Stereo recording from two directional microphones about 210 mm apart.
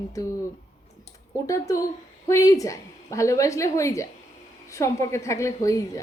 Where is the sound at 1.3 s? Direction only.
15° left (ahead or behind).